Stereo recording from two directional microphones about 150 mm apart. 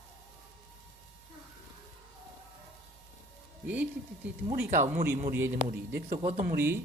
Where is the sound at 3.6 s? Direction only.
10° right (ahead or behind).